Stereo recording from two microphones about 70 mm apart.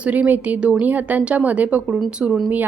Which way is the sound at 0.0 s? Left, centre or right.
Right.